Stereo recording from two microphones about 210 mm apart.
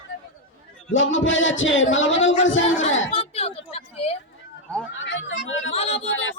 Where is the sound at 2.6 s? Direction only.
35° left (ahead or behind).